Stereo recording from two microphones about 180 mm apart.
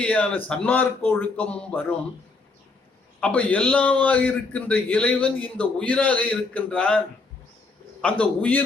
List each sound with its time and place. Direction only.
0.0 s a man's voice: 5° left (ahead or behind)
3.2 s a man's voice: 5° left (ahead or behind)
8.0 s a man's voice: 5° left (ahead or behind)